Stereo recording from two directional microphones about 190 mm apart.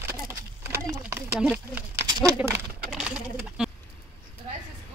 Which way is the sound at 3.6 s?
5° right (ahead or behind).